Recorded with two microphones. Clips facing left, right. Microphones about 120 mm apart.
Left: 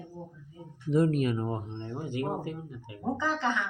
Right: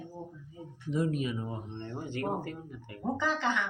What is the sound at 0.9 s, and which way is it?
Speech, 55° left (ahead or behind).